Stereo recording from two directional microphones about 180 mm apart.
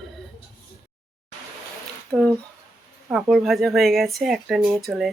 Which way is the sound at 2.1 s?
15° right (ahead or behind).